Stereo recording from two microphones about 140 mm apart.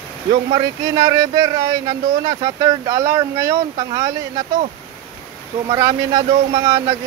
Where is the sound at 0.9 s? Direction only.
25° right (ahead or behind).